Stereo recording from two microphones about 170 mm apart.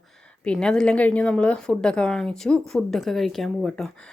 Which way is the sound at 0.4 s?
5° left (ahead or behind).